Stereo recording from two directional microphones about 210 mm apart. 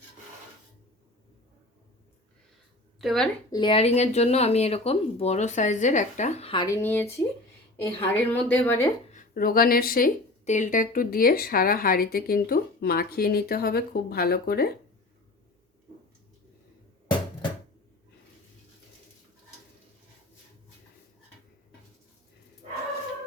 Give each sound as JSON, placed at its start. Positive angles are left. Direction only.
{"t": 3.0, "sound": "a woman's voice", "side_deg": 0}
{"t": 3.5, "sound": "a woman's voice", "side_deg": 25}
{"t": 9.1, "sound": "speech", "side_deg": 45}